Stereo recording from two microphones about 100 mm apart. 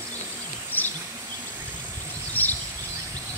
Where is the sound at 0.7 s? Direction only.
20° left (ahead or behind).